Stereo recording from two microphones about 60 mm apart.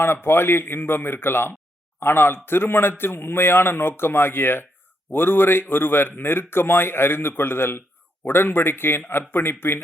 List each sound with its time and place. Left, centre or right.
0.0 s speech: left